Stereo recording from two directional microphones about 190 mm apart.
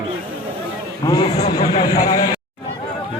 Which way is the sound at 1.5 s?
20° left (ahead or behind).